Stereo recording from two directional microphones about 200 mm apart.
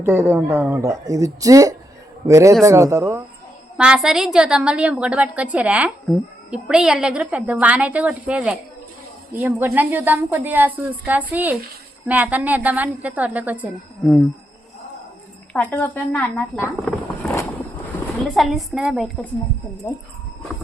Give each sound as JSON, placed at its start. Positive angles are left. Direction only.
{"t": 0.0, "sound": "a woman's voice", "side_deg": -10}
{"t": 15.5, "sound": "a woman's voice", "side_deg": 10}
{"t": 16.6, "sound": "a sound", "side_deg": 0}
{"t": 18.3, "sound": "a woman's voice", "side_deg": 0}